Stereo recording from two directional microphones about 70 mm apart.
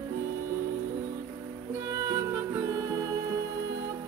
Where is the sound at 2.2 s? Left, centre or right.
Right.